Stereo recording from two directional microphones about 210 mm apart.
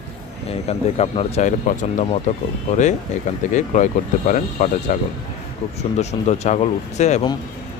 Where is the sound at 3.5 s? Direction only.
35° left (ahead or behind).